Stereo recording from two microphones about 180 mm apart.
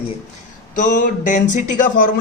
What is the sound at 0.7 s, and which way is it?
A man's voice, 45° left (ahead or behind).